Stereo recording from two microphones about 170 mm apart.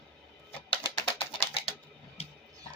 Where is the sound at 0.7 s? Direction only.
30° left (ahead or behind).